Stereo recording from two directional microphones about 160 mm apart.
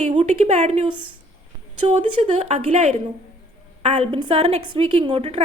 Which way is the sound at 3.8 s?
45° right (ahead or behind).